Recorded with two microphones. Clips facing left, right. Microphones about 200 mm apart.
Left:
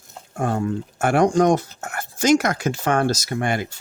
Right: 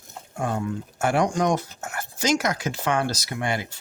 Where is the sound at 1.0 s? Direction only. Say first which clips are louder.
Left 5 dB; 55° left (ahead or behind).